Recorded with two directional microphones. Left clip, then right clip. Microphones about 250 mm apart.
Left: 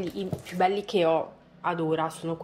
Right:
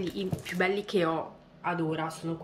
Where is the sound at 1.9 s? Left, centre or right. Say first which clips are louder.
Left 5 dB; centre.